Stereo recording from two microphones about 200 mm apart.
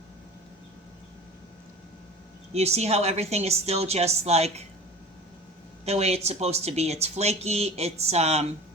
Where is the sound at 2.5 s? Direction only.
30° right (ahead or behind).